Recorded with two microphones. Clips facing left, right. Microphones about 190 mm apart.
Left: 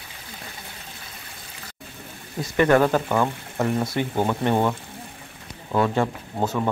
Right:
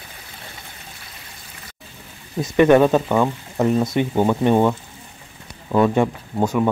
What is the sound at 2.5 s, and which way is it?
Speech, 20° right (ahead or behind).